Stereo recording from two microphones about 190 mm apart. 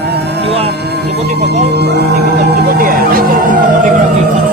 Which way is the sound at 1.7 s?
60° right (ahead or behind).